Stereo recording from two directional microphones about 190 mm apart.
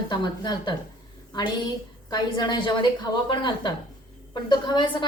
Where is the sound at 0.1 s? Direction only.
20° left (ahead or behind).